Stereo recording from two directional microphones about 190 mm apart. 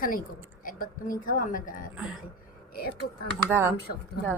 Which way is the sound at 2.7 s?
55° left (ahead or behind).